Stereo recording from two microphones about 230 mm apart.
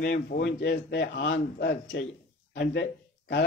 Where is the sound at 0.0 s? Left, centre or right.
Left.